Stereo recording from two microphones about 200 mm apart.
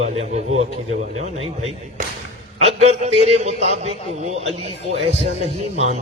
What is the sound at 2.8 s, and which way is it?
A man's voice, 30° right (ahead or behind).